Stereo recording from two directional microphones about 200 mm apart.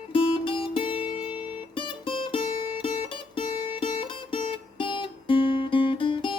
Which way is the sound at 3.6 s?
25° left (ahead or behind).